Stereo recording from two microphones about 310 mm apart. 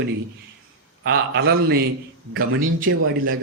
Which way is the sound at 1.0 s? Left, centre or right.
Right.